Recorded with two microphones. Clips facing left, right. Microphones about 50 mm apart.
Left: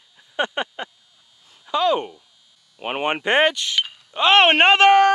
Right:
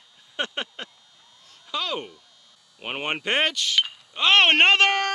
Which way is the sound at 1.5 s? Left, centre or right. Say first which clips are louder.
Left 10 dB; centre.